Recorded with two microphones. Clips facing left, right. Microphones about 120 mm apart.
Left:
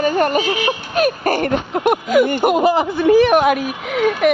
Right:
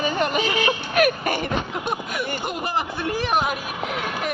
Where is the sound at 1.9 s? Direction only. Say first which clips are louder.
Left 15 dB; 90° left; by 3.6 s 75° left (ahead or behind).